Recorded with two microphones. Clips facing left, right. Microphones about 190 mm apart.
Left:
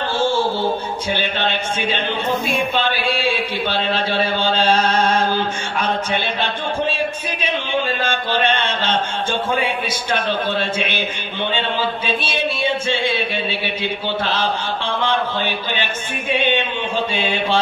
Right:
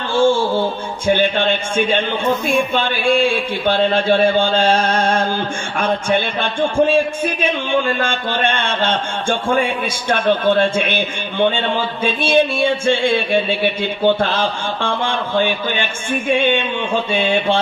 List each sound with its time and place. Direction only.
0.1 s a sound: 50° right (ahead or behind)
1.0 s a man's voice: 50° right (ahead or behind)
8.0 s a man's voice: 50° right (ahead or behind)